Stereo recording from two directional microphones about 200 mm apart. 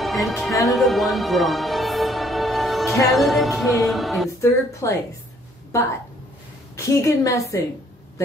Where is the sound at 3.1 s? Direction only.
Centre (ahead or behind).